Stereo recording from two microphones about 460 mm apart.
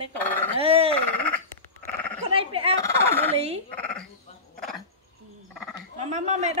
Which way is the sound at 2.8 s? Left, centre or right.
Centre.